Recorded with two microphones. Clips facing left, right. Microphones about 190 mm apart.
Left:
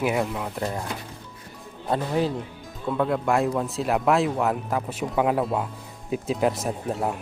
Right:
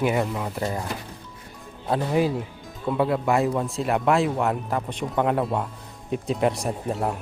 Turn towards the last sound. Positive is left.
turn(degrees=0)  # may be behind; listen again after turning